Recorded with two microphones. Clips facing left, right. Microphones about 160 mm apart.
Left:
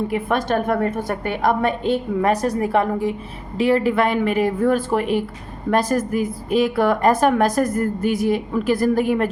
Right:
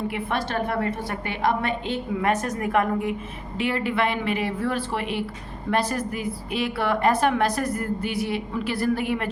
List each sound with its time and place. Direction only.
0.1 s a woman's voice: 45° left (ahead or behind)